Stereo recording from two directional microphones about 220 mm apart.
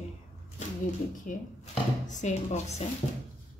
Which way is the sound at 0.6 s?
35° left (ahead or behind).